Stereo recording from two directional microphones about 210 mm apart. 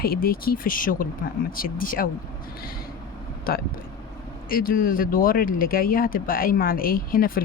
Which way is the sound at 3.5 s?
45° left (ahead or behind).